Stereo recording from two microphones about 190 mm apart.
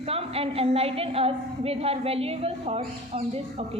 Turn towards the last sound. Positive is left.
turn(degrees=-30)  # may be behind; listen again after turning